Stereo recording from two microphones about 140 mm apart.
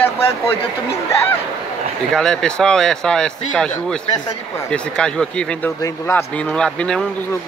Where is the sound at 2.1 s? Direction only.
5° left (ahead or behind).